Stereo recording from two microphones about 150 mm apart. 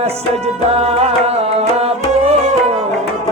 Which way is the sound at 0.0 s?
45° right (ahead or behind).